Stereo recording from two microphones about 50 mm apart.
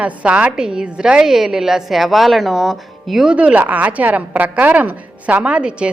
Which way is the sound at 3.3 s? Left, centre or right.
Right.